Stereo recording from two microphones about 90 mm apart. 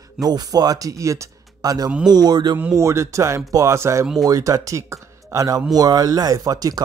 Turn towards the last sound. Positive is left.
turn(degrees=-45)  # may be behind; listen again after turning